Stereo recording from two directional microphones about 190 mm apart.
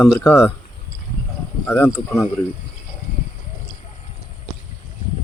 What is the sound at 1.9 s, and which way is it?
Speech, 15° left (ahead or behind).